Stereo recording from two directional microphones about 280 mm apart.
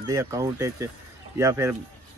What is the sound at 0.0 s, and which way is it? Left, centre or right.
A man's voice, centre.